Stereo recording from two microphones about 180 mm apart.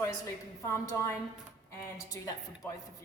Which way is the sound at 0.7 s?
15° left (ahead or behind).